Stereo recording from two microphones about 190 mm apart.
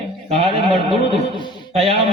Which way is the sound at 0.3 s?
30° right (ahead or behind).